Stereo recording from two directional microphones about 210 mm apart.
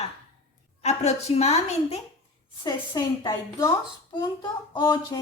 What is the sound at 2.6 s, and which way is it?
A woman's voice, 20° left (ahead or behind).